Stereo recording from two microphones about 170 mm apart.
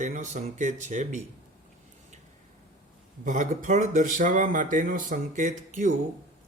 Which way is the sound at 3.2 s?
50° right (ahead or behind).